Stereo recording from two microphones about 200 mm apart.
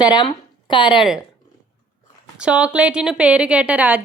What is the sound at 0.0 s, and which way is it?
Speech, 20° left (ahead or behind).